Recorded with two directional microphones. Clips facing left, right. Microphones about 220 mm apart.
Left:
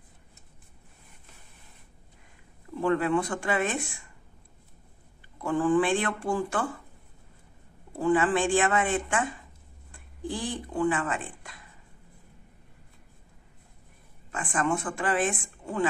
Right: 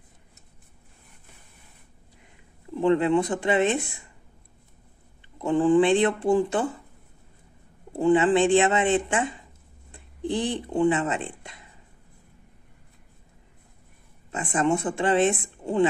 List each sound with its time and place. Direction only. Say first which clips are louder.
2.7 s speech: right 4 dB; 20° right (ahead or behind)
5.4 s speech: right 5 dB; 20° right (ahead or behind)
8.0 s speech: right 5 dB; 25° right (ahead or behind)
14.3 s speech: right 4 dB; 25° right (ahead or behind)